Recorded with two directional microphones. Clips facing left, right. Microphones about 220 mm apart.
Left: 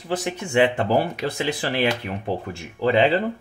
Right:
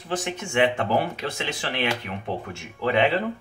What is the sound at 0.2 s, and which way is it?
Speech, 35° left (ahead or behind).